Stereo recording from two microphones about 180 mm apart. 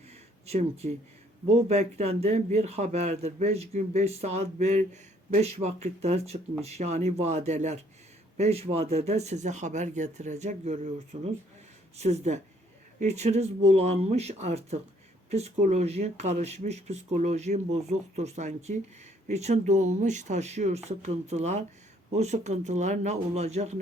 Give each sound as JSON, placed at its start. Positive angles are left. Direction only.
{"t": 0.4, "sound": "speech", "side_deg": -35}